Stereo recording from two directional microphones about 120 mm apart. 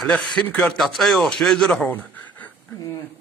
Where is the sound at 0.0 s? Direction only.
5° left (ahead or behind).